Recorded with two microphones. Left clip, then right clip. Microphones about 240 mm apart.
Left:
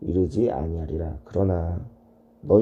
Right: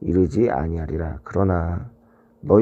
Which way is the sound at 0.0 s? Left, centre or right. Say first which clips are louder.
Right 4 dB; right.